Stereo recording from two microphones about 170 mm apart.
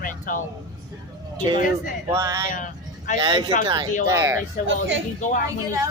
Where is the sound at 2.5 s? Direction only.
50° left (ahead or behind).